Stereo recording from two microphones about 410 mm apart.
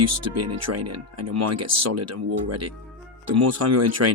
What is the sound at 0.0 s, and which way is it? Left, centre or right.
Speech, right.